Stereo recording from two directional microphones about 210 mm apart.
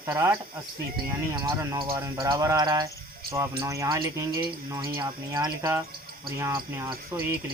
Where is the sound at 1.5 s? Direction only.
15° right (ahead or behind).